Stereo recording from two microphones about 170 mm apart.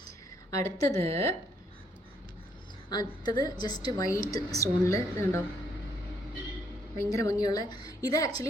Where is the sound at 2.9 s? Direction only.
25° left (ahead or behind).